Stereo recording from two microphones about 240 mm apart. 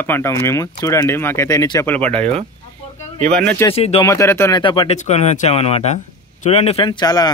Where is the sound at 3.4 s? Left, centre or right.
Centre.